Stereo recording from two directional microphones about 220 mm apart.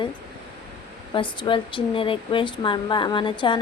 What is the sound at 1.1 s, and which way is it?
Speech, 20° left (ahead or behind).